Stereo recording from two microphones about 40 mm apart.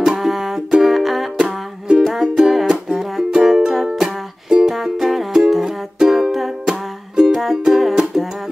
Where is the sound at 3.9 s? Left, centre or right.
Centre.